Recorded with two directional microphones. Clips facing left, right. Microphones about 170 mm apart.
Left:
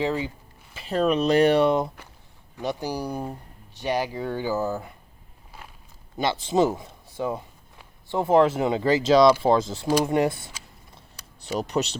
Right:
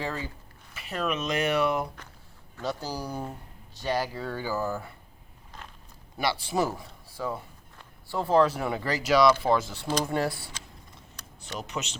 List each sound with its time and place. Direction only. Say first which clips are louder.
0.0 s speech: left 8 dB; 15° left (ahead or behind)
0.7 s speech: left 8 dB; 30° left (ahead or behind)
2.6 s speech: left 4 dB; 15° left (ahead or behind)
5.6 s walk: even; 10° left (ahead or behind)
6.1 s speech: left 5 dB; 20° left (ahead or behind)
9.8 s speech: left 6 dB; 10° left (ahead or behind)
11.6 s speech: left 9 dB; 35° left (ahead or behind)